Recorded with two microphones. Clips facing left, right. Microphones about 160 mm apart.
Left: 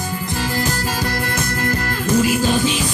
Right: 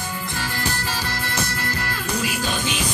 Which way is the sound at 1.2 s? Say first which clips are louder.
Left 5 dB; 50° left (ahead or behind).